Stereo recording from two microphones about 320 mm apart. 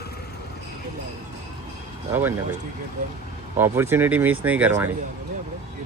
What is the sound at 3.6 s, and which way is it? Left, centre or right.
Speech, centre.